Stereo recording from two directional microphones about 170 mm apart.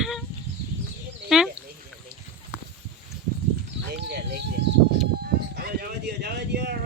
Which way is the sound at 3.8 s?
70° right (ahead or behind).